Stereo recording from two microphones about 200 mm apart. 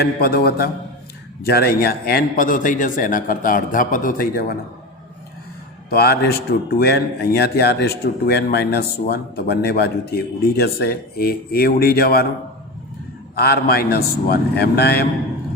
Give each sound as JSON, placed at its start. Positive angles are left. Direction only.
{"t": 0.0, "sound": "speech", "side_deg": 50}
{"t": 5.9, "sound": "speech", "side_deg": 50}
{"t": 13.3, "sound": "speech", "side_deg": 50}